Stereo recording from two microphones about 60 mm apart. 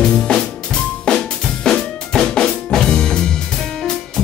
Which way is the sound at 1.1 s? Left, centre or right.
Centre.